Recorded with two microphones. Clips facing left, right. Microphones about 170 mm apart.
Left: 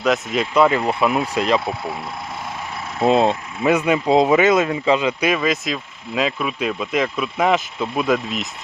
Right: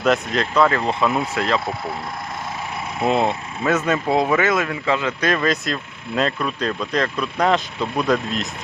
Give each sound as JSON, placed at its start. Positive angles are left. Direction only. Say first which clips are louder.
{"t": 0.0, "sound": "speech", "louder": "even", "side_deg": 0}
{"t": 3.0, "sound": "speech", "louder": "left 4 dB", "side_deg": 20}